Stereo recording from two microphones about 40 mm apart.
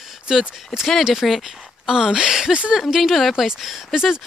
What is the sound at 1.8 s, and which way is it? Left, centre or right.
Speech, centre.